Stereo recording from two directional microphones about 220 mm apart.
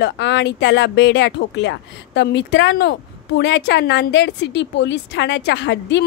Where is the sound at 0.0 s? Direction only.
55° left (ahead or behind).